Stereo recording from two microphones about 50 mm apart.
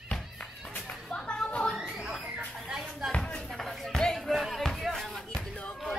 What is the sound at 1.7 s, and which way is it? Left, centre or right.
Music, centre.